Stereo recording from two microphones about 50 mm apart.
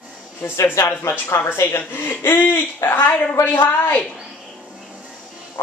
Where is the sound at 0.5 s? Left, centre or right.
Left.